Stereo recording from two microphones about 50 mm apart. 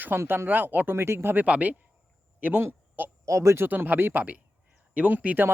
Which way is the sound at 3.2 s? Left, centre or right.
Right.